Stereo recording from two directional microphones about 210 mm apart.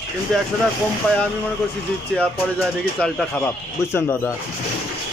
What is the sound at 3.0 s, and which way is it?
Speech, 5° left (ahead or behind).